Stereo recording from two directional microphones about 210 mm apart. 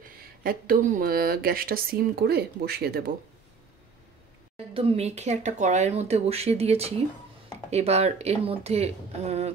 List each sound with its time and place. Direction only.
0.0 s speech: 45° right (ahead or behind)
4.6 s speech: 25° right (ahead or behind)